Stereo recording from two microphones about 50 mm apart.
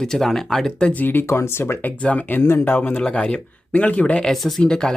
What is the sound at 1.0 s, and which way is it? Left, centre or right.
Speech, left.